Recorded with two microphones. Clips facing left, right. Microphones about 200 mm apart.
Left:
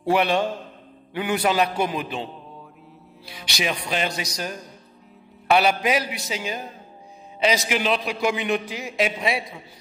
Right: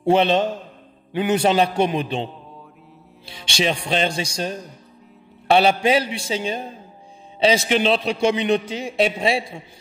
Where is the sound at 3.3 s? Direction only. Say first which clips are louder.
Right 5 dB; 25° right (ahead or behind).